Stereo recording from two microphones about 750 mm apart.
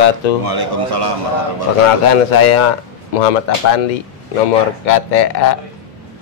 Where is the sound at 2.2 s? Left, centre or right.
Left.